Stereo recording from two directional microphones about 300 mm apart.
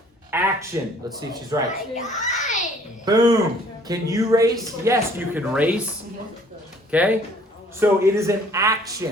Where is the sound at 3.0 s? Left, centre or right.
Centre.